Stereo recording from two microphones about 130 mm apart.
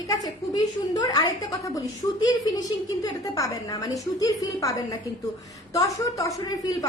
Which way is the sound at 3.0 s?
25° left (ahead or behind).